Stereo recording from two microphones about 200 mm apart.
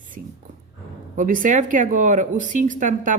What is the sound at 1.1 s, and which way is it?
A woman's voice, 40° right (ahead or behind).